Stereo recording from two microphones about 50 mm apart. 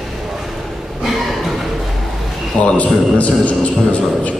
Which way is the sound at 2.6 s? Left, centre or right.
Left.